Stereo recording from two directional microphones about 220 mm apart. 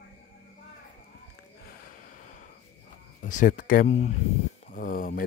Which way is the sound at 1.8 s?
40° left (ahead or behind).